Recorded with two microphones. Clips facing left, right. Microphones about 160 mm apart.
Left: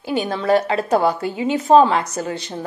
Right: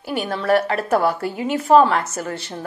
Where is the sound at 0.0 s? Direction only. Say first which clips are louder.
Left 2 dB; 20° left (ahead or behind).